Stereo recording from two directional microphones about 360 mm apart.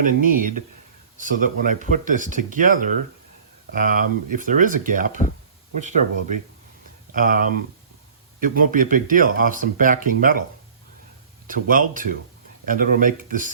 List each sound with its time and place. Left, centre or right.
0.0 s speech: right
7.1 s speech: right
11.4 s speech: right